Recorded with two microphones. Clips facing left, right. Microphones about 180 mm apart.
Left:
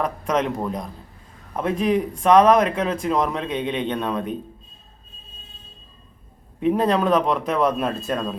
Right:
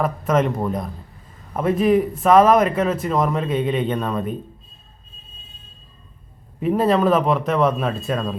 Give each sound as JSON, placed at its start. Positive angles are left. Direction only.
{"t": 0.0, "sound": "speech", "side_deg": -5}
{"t": 6.6, "sound": "speech", "side_deg": -5}